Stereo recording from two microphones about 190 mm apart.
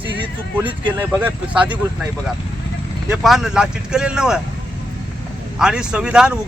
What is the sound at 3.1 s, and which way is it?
Speech, centre (ahead or behind).